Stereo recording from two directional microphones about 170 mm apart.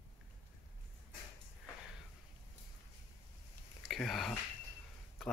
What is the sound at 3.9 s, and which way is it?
Speech, centre (ahead or behind).